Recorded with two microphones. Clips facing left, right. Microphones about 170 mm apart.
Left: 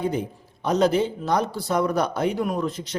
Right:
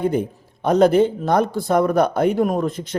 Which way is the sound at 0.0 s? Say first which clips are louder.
Right 5 dB; 55° right (ahead or behind).